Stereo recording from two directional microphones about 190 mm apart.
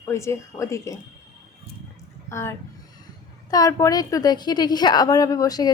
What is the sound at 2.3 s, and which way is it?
Speech, 15° left (ahead or behind).